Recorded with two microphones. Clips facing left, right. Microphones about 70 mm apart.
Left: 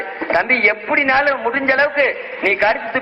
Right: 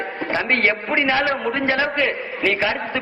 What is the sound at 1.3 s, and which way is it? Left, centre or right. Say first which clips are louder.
A man's voice: left 4 dB; left.